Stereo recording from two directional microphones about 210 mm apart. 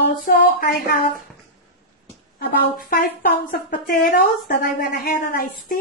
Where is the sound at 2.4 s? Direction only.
45° left (ahead or behind).